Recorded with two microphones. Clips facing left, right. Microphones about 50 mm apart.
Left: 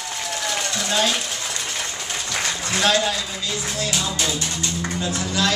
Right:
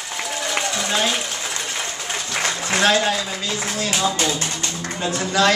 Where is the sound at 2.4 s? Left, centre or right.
Right.